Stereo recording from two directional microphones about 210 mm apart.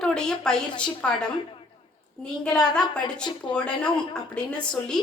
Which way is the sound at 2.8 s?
5° left (ahead or behind).